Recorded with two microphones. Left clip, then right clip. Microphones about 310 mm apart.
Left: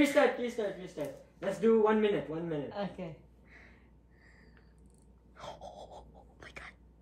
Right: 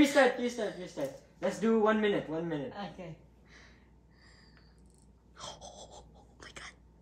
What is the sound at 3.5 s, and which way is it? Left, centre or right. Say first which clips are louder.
Gasp: even; centre.